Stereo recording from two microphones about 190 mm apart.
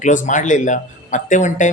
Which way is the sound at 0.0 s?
40° left (ahead or behind).